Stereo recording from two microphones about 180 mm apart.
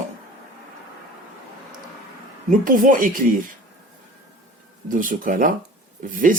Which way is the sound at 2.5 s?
50° right (ahead or behind).